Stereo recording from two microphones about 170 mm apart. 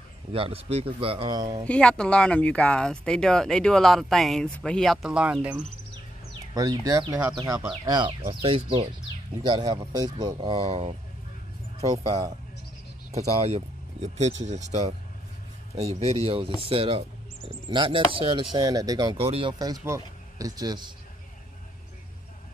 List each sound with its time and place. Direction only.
0.3 s speech: 35° right (ahead or behind)
1.7 s speech: 5° left (ahead or behind)
6.5 s speech: 20° right (ahead or behind)
8.5 s speech: 30° right (ahead or behind)
13.1 s speech: 40° right (ahead or behind); by 19.1 s 20° right (ahead or behind)
19.1 s speech: 35° right (ahead or behind)
19.8 s speech: 20° right (ahead or behind)